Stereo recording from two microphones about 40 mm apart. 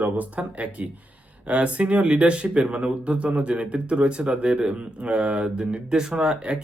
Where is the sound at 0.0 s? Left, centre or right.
Right.